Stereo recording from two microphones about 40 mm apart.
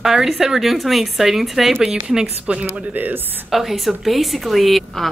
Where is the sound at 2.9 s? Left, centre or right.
Right.